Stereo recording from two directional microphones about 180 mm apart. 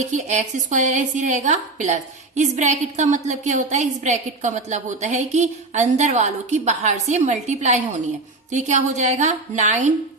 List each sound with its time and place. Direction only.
0.0 s a woman's voice: 40° right (ahead or behind)